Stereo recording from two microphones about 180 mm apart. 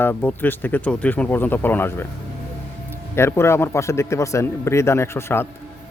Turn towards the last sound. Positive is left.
turn(degrees=15)  # may be behind; listen again after turning